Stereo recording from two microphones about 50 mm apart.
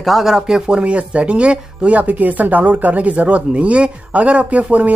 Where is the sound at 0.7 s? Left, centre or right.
Right.